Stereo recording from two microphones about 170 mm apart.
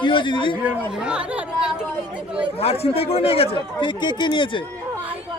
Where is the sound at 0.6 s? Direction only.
10° right (ahead or behind).